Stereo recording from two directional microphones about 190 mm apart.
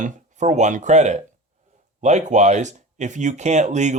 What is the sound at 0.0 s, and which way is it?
Speech, 40° right (ahead or behind).